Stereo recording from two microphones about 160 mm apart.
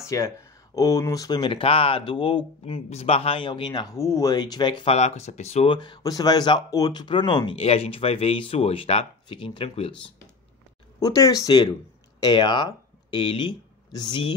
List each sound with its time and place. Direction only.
0.1 s speech: 20° left (ahead or behind)
3.9 s speech: 20° left (ahead or behind)
4.9 s speech: 45° left (ahead or behind)
5.7 s speech: 25° left (ahead or behind)
11.0 s speech: 20° left (ahead or behind)